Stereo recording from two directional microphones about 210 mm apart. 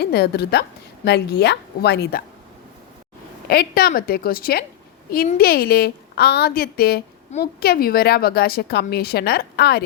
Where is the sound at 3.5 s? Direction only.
45° left (ahead or behind).